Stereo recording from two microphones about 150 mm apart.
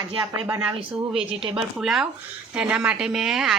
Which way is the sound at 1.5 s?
5° right (ahead or behind).